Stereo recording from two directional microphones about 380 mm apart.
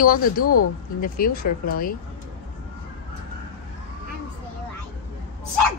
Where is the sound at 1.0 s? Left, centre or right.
Left.